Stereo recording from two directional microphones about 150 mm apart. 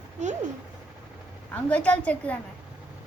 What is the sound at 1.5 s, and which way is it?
Speech, 10° left (ahead or behind).